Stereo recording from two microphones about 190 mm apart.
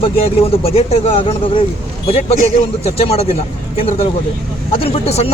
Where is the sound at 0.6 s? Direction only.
30° left (ahead or behind).